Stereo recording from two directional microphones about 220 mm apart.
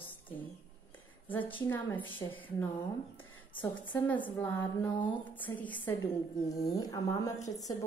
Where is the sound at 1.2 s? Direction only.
10° left (ahead or behind).